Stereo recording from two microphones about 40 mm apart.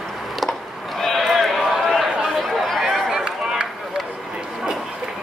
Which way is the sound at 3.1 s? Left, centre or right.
Centre.